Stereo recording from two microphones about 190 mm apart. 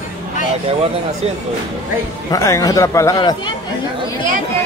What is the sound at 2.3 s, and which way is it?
A man's voice, 15° left (ahead or behind).